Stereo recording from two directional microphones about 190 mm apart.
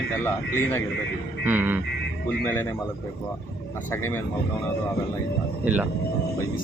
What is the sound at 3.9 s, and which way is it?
Speech, 15° left (ahead or behind).